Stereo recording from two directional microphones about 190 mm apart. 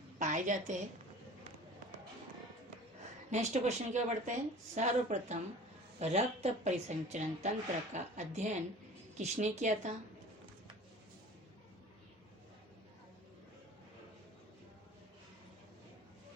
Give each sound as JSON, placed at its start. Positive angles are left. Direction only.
{"t": 0.2, "sound": "a woman's voice", "side_deg": -40}
{"t": 3.2, "sound": "speech", "side_deg": -35}